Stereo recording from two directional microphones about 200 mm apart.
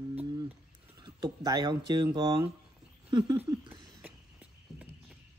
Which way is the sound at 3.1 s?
20° right (ahead or behind).